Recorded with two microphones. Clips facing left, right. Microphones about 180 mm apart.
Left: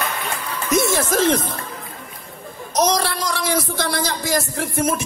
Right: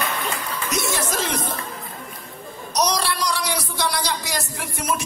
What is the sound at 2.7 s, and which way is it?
A man's voice, 50° left (ahead or behind).